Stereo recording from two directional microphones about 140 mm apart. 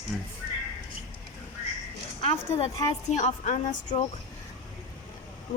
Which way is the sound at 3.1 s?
55° left (ahead or behind).